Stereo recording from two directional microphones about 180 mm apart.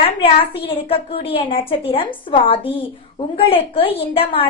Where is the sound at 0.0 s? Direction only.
30° left (ahead or behind).